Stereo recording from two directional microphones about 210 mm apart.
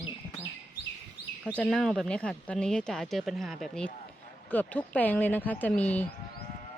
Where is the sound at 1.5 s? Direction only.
5° left (ahead or behind).